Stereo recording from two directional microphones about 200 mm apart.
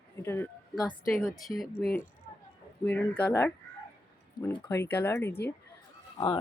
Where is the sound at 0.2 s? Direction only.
15° left (ahead or behind).